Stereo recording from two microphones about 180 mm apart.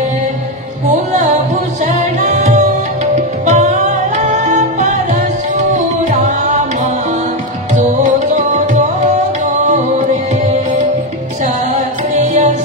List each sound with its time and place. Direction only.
1.9 s music: 40° right (ahead or behind)
11.4 s music: 40° right (ahead or behind)